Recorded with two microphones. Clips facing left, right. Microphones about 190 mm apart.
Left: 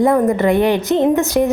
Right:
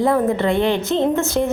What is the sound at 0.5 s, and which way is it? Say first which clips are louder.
Speech: left 4 dB; 15° left (ahead or behind).